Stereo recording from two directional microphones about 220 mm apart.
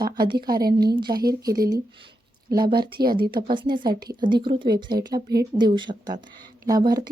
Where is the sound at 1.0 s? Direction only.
20° right (ahead or behind).